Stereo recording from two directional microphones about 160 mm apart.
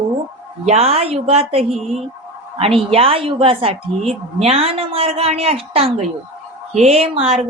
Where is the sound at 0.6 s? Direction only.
40° right (ahead or behind).